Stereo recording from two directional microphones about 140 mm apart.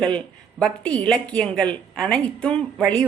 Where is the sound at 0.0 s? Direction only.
5° left (ahead or behind).